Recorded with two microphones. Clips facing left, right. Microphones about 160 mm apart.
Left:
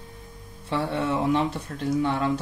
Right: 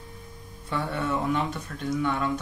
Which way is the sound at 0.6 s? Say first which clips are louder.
Left 3 dB; 25° left (ahead or behind).